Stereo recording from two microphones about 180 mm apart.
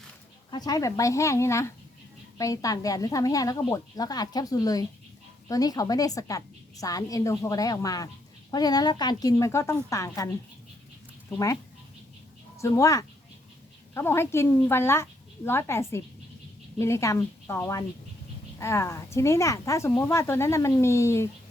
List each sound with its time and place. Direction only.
0.5 s a woman's voice: 20° left (ahead or behind)
11.3 s a woman's voice: 20° left (ahead or behind)
12.5 s speech: 15° left (ahead or behind)